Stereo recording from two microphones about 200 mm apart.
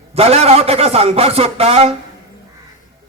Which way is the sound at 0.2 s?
30° right (ahead or behind).